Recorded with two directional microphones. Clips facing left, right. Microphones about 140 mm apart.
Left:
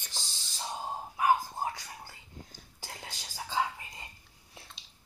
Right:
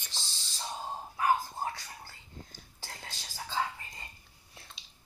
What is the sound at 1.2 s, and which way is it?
Whispering, 15° left (ahead or behind).